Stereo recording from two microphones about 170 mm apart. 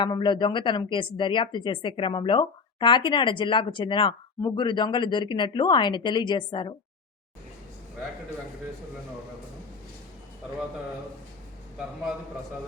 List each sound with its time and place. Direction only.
0.0 s a woman's voice: 25° left (ahead or behind)